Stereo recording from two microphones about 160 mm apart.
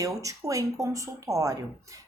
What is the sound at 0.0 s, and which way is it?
Speech, 20° right (ahead or behind).